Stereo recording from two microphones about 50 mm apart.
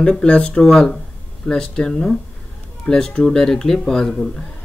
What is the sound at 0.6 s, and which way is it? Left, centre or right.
A man's voice, centre.